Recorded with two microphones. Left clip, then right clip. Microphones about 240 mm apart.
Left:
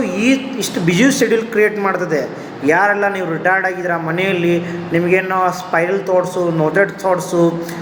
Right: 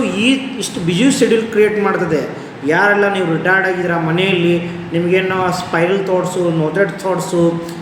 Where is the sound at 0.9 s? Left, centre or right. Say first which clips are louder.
Even; centre.